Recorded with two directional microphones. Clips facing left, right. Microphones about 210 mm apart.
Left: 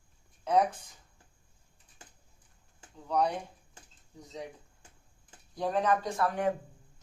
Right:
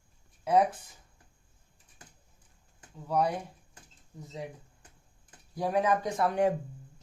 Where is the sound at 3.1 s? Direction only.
5° right (ahead or behind).